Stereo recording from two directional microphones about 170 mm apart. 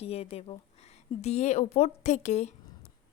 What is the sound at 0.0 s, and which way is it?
A woman's voice, 35° left (ahead or behind).